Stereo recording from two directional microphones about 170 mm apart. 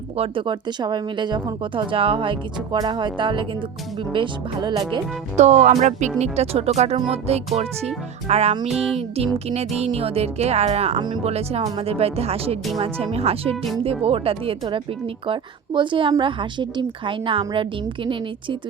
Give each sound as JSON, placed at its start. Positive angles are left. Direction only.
{"t": 0.2, "sound": "speech", "side_deg": -30}
{"t": 5.4, "sound": "a woman's voice", "side_deg": -45}
{"t": 8.7, "sound": "music", "side_deg": -5}
{"t": 9.0, "sound": "a woman's voice", "side_deg": -35}
{"t": 10.9, "sound": "a woman's voice", "side_deg": -25}